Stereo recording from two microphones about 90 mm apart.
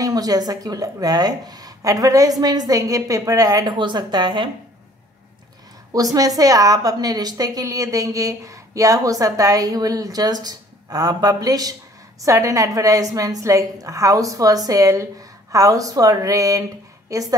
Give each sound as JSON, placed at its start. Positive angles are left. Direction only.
{"t": 0.0, "sound": "speech", "side_deg": -45}
{"t": 3.7, "sound": "a woman's voice", "side_deg": -55}
{"t": 5.9, "sound": "a woman's voice", "side_deg": -40}